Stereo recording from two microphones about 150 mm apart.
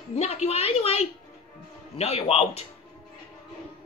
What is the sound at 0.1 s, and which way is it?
A woman's voice, 45° left (ahead or behind).